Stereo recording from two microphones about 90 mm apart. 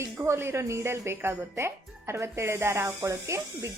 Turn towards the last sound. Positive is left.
turn(degrees=-30)  # may be behind; listen again after turning